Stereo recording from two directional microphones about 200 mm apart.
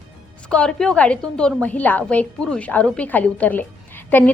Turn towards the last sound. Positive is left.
turn(degrees=10)  # may be behind; listen again after turning